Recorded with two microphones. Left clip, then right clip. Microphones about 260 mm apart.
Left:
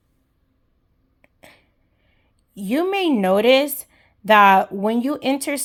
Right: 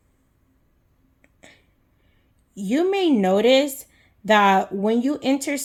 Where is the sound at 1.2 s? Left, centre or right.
Left.